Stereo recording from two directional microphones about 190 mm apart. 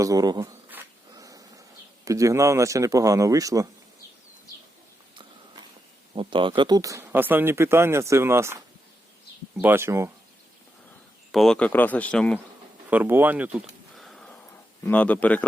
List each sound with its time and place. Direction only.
0.0 s a sound: 20° right (ahead or behind)
2.0 s speech: 15° right (ahead or behind)
6.1 s speech: 25° right (ahead or behind)
11.3 s speech: centre (ahead or behind)
12.9 s a sound: 10° right (ahead or behind)
14.8 s speech: 10° left (ahead or behind)